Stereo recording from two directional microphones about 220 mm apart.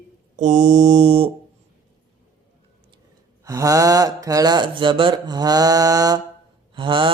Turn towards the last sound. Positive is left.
turn(degrees=-20)  # may be behind; listen again after turning